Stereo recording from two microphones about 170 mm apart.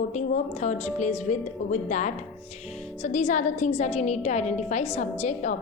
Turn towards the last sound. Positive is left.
turn(degrees=45)  # may be behind; listen again after turning